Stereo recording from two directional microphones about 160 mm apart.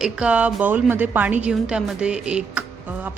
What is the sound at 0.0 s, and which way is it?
A woman's voice, 5° right (ahead or behind).